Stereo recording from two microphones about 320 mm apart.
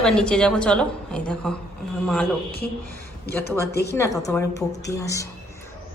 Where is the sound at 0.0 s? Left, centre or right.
Centre.